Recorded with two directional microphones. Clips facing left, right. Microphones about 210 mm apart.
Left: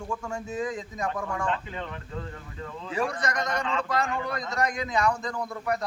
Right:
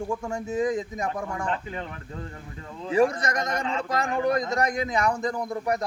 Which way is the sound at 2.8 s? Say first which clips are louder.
Right 7 dB; 25° right (ahead or behind).